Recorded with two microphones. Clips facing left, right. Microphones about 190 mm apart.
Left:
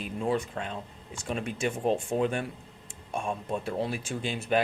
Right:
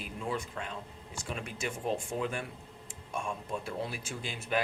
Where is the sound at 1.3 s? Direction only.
25° left (ahead or behind).